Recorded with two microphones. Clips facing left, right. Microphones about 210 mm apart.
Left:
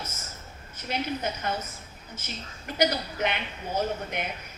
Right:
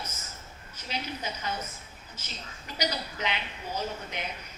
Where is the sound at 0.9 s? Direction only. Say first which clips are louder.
Left 6 dB; 55° left (ahead or behind).